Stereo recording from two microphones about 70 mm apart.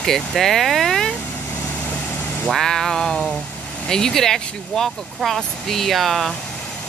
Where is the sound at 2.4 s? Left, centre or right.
Centre.